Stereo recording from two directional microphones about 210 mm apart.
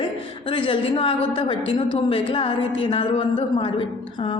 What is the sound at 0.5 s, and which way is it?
A woman's voice, 25° left (ahead or behind).